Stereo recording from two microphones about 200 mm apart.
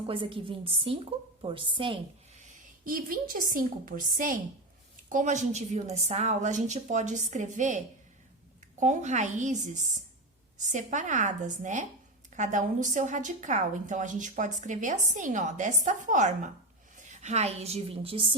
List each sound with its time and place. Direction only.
0.1 s a woman's voice: 25° right (ahead or behind)
2.4 s a woman's voice: 45° right (ahead or behind)
8.8 s a woman's voice: 35° right (ahead or behind)